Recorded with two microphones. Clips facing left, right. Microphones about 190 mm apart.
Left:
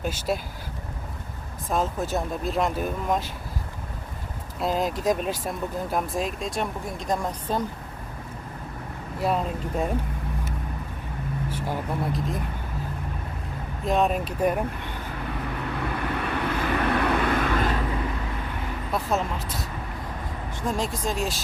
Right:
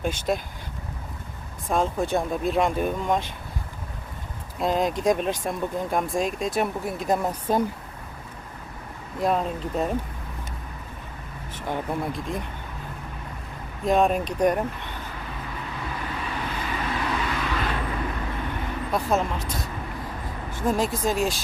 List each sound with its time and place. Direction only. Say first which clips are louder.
0.0 s speech: right 2 dB; 5° left (ahead or behind)
1.7 s speech: right 2 dB; 5° left (ahead or behind)
4.6 s speech: right 2 dB; centre (ahead or behind)
9.2 s speech: right 2 dB; 5° left (ahead or behind)
11.4 s speech: right 2 dB; 10° left (ahead or behind)
13.8 s speech: right 2 dB; centre (ahead or behind)
16.0 s vehicle: left 3 dB; 60° left (ahead or behind)
18.9 s speech: right 2 dB; centre (ahead or behind)